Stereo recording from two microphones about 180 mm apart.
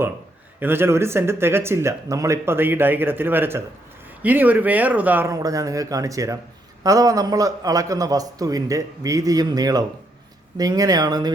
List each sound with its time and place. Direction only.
0.6 s a man's voice: 10° right (ahead or behind)